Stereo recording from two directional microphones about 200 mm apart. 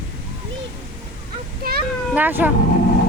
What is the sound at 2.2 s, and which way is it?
Speech, 10° right (ahead or behind).